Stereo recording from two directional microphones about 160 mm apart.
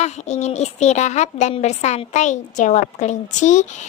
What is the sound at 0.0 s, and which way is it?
A woman's voice, 45° left (ahead or behind).